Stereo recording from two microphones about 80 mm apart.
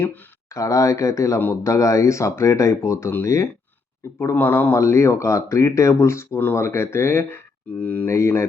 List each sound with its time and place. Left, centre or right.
0.5 s speech: left
4.8 s speech: left
8.1 s speech: left